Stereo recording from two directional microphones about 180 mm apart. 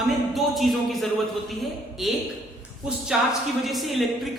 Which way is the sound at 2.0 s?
Centre (ahead or behind).